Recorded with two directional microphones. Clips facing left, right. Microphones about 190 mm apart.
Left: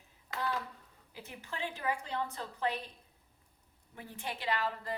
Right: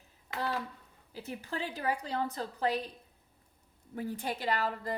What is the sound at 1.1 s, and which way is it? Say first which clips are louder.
A woman's voice: right 6 dB; 35° right (ahead or behind).